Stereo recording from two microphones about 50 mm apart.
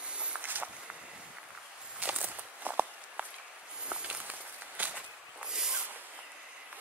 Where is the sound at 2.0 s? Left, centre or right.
Right.